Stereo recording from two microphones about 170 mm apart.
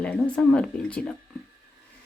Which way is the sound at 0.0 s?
5° left (ahead or behind).